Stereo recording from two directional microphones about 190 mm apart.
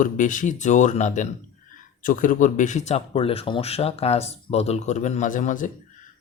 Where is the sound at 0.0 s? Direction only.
45° left (ahead or behind).